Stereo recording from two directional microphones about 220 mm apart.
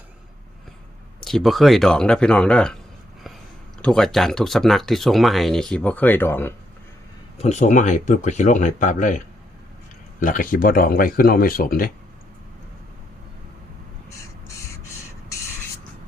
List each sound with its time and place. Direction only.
1.2 s speech: centre (ahead or behind)
3.8 s speech: 5° left (ahead or behind)
7.4 s speech: 35° left (ahead or behind)
10.2 s speech: 40° left (ahead or behind)
14.1 s crow: 15° left (ahead or behind)